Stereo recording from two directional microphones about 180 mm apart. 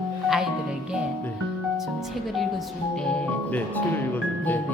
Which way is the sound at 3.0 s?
5° left (ahead or behind).